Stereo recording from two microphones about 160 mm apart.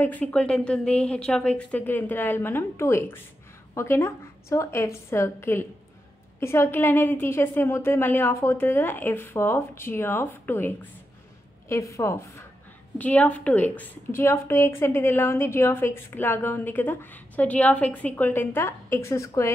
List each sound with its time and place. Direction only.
0.0 s a woman's voice: 10° left (ahead or behind)